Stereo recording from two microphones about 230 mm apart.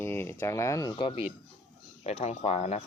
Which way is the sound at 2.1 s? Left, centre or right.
Left.